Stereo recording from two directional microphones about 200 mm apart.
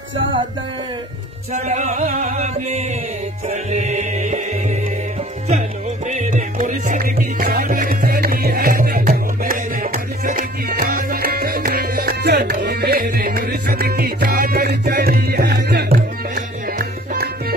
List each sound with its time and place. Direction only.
1.5 s music: 35° right (ahead or behind)
6.0 s music: 35° right (ahead or behind); by 16.0 s 55° right (ahead or behind)
16.3 s music: 45° right (ahead or behind)